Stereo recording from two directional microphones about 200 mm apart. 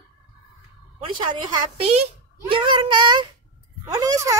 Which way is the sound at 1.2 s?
25° right (ahead or behind).